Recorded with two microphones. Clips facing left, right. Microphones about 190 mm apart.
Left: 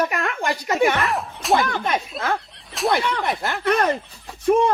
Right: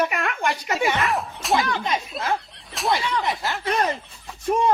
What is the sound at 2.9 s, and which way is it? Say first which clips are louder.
Speech: even; 60° left (ahead or behind).